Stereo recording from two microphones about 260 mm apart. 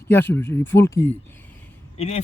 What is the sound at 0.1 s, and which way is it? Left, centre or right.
Speech, centre.